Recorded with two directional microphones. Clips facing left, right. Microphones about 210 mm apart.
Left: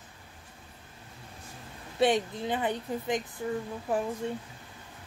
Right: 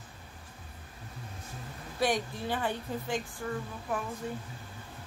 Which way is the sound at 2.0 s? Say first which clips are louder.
Left 5 dB; 25° left (ahead or behind).